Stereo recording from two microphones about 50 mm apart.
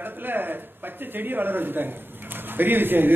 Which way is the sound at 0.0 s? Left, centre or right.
Right.